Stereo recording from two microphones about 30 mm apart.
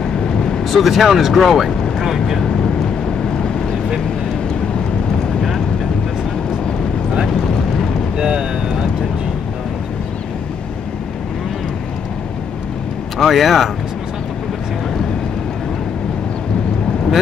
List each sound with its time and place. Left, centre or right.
0.7 s speech: centre
8.2 s speech: right
13.2 s speech: centre